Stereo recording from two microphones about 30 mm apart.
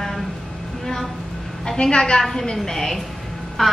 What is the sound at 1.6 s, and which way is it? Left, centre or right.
Speech, left.